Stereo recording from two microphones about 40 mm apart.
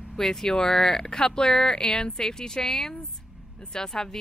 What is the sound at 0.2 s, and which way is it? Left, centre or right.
Speech, centre.